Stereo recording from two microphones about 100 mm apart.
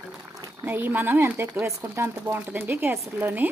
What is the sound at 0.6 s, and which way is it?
Speech, 20° right (ahead or behind).